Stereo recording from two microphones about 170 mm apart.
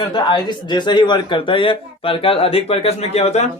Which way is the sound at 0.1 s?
25° left (ahead or behind).